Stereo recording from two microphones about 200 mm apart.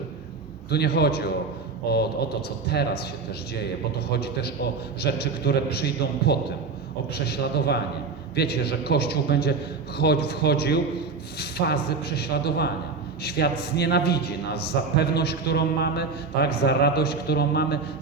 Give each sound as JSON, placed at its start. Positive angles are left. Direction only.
{"t": 0.7, "sound": "a man's voice", "side_deg": 55}